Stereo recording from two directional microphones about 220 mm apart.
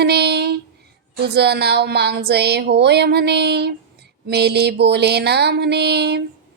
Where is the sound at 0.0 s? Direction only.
50° right (ahead or behind).